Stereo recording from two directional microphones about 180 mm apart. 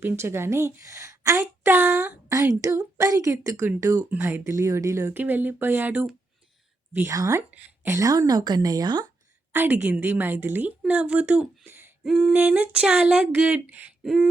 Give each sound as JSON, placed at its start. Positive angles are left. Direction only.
{"t": 0.0, "sound": "a woman's voice", "side_deg": -15}
{"t": 9.5, "sound": "a woman's voice", "side_deg": -10}